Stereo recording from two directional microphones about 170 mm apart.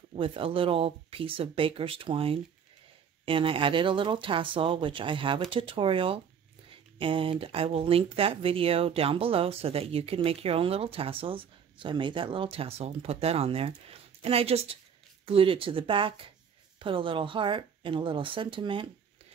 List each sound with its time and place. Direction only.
0.1 s speech: 30° right (ahead or behind)